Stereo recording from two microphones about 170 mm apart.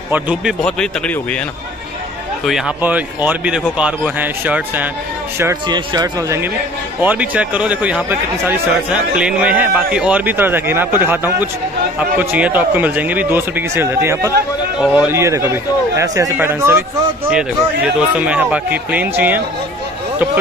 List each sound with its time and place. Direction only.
0.1 s speech: 10° right (ahead or behind)
0.6 s speech: 5° left (ahead or behind)
2.4 s speech: 5° right (ahead or behind)
5.4 s speech: 20° right (ahead or behind)
7.0 s speech: 10° right (ahead or behind)
15.1 s speech: 15° right (ahead or behind)